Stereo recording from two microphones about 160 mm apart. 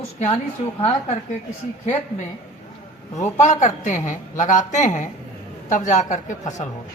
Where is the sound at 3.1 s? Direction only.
45° left (ahead or behind).